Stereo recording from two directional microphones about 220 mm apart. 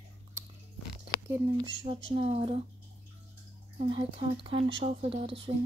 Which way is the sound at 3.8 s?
25° right (ahead or behind).